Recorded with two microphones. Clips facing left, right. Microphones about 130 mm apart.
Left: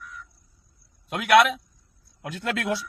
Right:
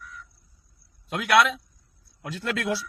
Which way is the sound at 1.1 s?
50° left (ahead or behind).